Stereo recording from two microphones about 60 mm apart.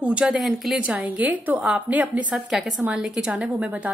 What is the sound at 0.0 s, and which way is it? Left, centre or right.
Speech, centre.